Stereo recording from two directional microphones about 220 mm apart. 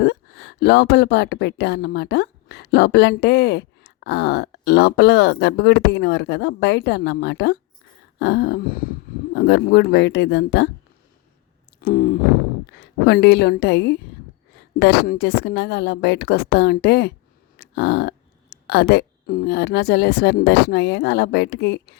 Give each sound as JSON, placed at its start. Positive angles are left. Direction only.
{"t": 0.0, "sound": "speech", "side_deg": 50}
{"t": 11.8, "sound": "speech", "side_deg": 45}
{"t": 17.6, "sound": "a sound", "side_deg": 50}
{"t": 18.5, "sound": "speech", "side_deg": 50}